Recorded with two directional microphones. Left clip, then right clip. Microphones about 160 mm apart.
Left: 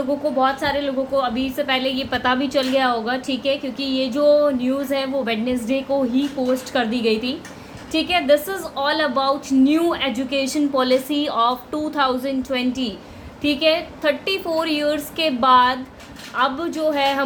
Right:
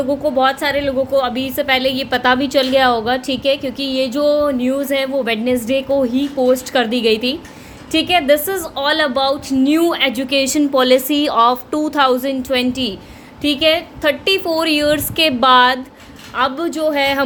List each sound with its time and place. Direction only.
0.3 s a woman's voice: 60° right (ahead or behind)